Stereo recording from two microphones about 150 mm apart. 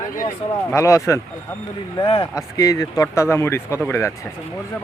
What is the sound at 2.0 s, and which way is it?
Speech, 35° left (ahead or behind).